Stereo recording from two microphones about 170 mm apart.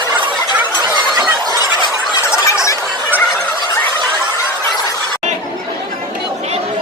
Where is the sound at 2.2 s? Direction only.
15° left (ahead or behind).